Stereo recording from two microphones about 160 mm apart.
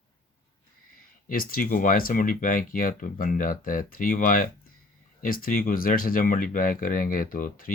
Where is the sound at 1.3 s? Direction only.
65° left (ahead or behind).